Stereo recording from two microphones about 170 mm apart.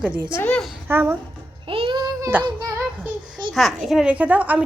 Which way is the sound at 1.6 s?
30° right (ahead or behind).